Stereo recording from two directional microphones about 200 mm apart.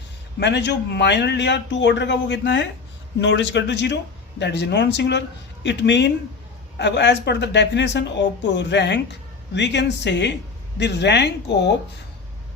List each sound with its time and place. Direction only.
0.3 s a woman's voice: 60° left (ahead or behind)